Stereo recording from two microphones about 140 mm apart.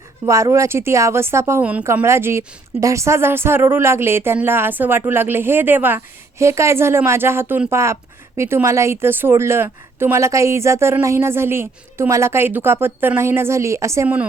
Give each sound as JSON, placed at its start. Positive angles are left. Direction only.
{"t": 0.3, "sound": "a woman's voice", "side_deg": -20}